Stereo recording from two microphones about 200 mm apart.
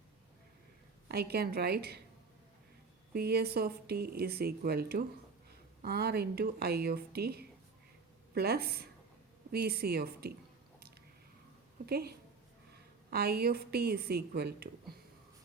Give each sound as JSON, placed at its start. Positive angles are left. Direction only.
{"t": 1.0, "sound": "speech", "side_deg": -50}
{"t": 3.1, "sound": "speech", "side_deg": -50}
{"t": 11.9, "sound": "speech", "side_deg": -50}